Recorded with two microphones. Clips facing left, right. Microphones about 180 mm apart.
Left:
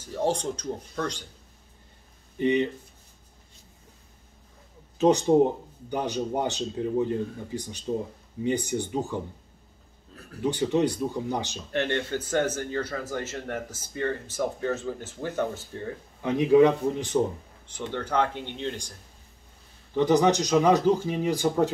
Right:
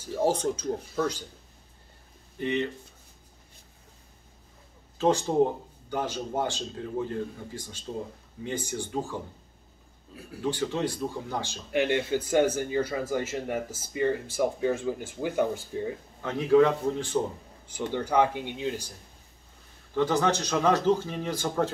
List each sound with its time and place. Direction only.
0.0 s speech: 10° right (ahead or behind)
2.3 s speech: 15° left (ahead or behind)
4.9 s a sound: 20° left (ahead or behind)
5.9 s speech: 15° left (ahead or behind)
10.4 s speech: 15° left (ahead or behind)
11.7 s speech: 10° right (ahead or behind)
16.2 s speech: 15° left (ahead or behind)
17.6 s speech: 10° right (ahead or behind)
20.0 s speech: 15° left (ahead or behind)